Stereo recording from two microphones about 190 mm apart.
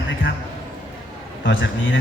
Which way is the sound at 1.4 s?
75° left (ahead or behind).